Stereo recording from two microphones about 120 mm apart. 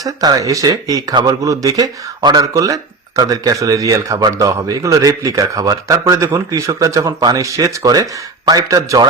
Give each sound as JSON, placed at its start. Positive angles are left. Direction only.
{"t": 0.0, "sound": "speech", "side_deg": -30}